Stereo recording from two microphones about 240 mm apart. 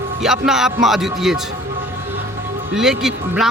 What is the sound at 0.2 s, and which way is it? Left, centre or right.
Speech, centre.